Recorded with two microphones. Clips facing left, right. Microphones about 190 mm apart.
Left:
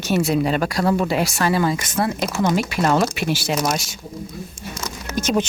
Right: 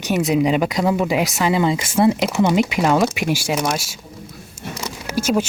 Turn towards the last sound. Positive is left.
turn(degrees=-5)  # may be behind; listen again after turning